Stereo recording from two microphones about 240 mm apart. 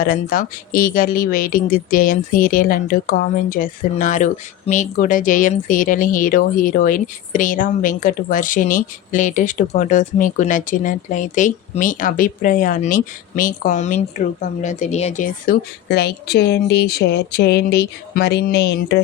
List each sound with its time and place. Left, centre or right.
0.0 s a woman's voice: left